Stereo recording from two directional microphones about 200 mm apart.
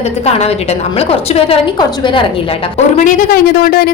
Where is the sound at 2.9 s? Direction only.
40° left (ahead or behind).